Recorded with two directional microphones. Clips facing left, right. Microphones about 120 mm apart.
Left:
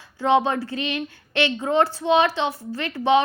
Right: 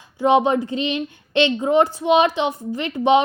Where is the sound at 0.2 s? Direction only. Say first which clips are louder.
Right 3 dB; 15° right (ahead or behind).